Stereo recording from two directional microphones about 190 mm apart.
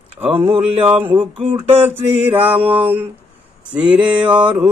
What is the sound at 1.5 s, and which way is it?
Mantra, 10° right (ahead or behind).